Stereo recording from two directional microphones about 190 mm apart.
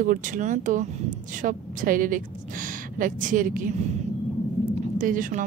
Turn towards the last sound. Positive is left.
turn(degrees=-45)  # may be behind; listen again after turning